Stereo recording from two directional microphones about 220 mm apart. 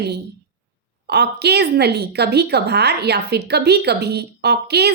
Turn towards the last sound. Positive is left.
turn(degrees=-50)  # may be behind; listen again after turning